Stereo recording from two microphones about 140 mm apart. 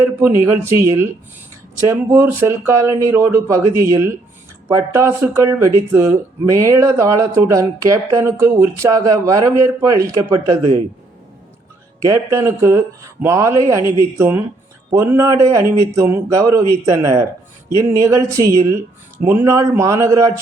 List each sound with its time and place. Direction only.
0.0 s speech: 15° right (ahead or behind)
12.0 s speech: 20° right (ahead or behind)